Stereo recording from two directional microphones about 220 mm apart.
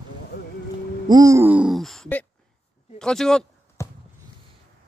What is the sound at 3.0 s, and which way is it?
Speech, 5° left (ahead or behind).